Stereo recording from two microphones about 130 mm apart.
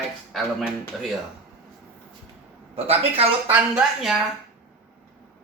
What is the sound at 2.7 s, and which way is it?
Speech, 50° right (ahead or behind).